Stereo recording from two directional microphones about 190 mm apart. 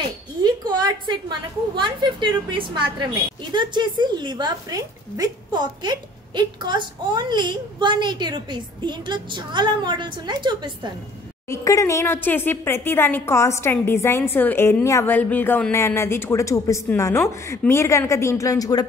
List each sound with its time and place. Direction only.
0.4 s a sound: 20° right (ahead or behind)
1.8 s a woman's voice: 25° right (ahead or behind)
11.4 s a woman's voice: 15° left (ahead or behind)